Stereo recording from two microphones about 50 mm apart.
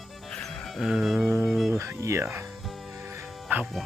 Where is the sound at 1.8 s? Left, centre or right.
Right.